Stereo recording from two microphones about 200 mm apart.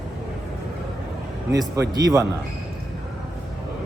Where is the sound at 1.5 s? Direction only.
15° right (ahead or behind).